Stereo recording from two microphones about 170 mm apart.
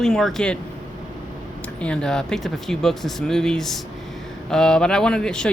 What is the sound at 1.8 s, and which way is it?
Speech, 5° left (ahead or behind).